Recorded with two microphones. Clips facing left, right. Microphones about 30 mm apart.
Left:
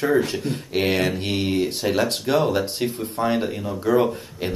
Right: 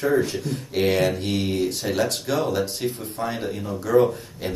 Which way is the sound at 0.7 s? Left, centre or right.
Left.